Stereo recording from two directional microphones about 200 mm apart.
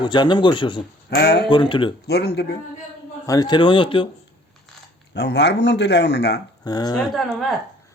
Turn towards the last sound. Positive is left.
turn(degrees=0)  # may be behind; listen again after turning